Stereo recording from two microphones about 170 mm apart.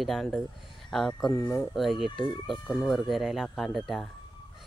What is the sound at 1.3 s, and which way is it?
Speech, 15° left (ahead or behind).